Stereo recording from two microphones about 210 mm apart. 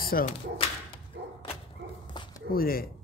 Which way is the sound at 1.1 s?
55° right (ahead or behind).